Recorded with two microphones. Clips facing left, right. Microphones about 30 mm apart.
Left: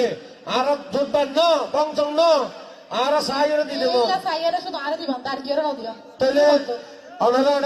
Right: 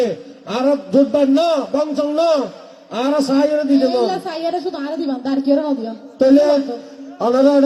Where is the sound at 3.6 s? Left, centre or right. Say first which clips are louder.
Right 5 dB; left.